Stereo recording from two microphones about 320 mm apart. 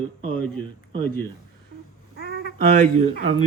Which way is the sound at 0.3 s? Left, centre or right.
Centre.